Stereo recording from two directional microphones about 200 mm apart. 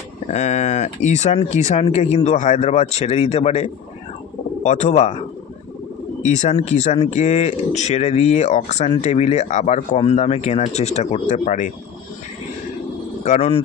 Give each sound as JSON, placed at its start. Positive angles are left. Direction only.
{"t": 0.3, "sound": "speech", "side_deg": 35}
{"t": 6.2, "sound": "speech", "side_deg": 35}
{"t": 13.2, "sound": "speech", "side_deg": 35}